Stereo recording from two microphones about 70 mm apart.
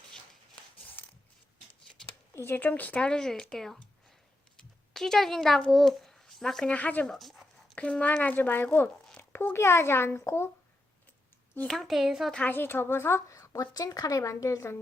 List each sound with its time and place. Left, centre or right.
2.3 s speech: left; by 3.8 s centre
4.5 s a sound: centre
5.7 s a child's voice: centre
6.7 s speech: left
7.1 s dog: centre
7.8 s a child's voice: centre; by 10.5 s left
11.7 s a woman's voice: centre
12.5 s a woman's voice: left